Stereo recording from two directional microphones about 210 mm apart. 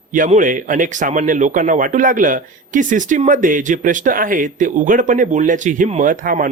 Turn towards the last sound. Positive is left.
turn(degrees=-40)  # may be behind; listen again after turning